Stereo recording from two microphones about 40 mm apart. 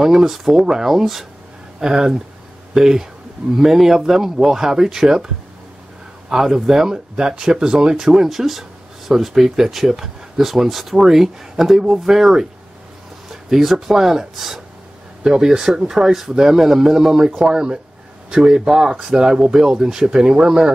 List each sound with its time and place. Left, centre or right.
0.0 s speech: centre
6.3 s speech: centre